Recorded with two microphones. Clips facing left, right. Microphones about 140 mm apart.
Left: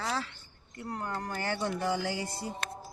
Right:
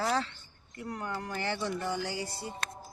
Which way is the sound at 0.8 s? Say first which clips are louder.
Left 1 dB; 35° left (ahead or behind).